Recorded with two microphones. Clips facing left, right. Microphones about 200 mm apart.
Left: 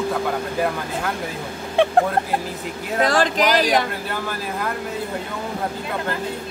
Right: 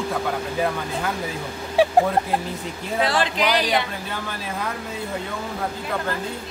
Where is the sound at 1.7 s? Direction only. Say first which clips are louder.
Even; 5° right (ahead or behind).